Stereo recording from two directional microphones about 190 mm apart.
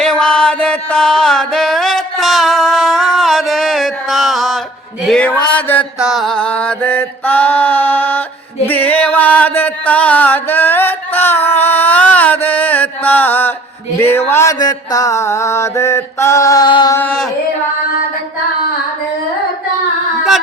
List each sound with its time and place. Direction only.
0.0 s music: 5° left (ahead or behind)
5.0 s a sound: 5° left (ahead or behind)
5.5 s mantra: 10° left (ahead or behind)
6.0 s music: centre (ahead or behind)
6.4 s mantra: 5° left (ahead or behind)
8.6 s music: 10° left (ahead or behind)
14.0 s mantra: 10° left (ahead or behind)
17.0 s mantra: 5° left (ahead or behind)